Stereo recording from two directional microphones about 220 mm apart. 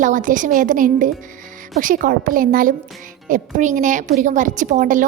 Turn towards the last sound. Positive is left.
turn(degrees=-35)  # may be behind; listen again after turning